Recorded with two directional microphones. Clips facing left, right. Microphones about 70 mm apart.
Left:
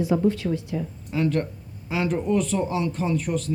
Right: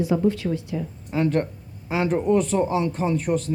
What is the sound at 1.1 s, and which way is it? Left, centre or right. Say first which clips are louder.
Speech: right 2 dB; right.